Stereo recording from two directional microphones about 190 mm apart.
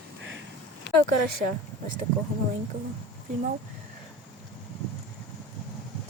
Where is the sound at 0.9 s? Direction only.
65° left (ahead or behind).